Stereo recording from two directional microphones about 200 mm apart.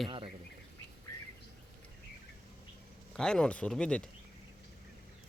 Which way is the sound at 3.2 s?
5° left (ahead or behind).